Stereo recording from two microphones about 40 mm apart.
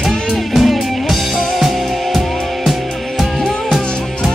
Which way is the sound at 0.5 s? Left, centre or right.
Centre.